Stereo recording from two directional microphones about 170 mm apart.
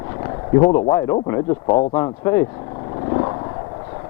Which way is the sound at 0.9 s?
20° left (ahead or behind).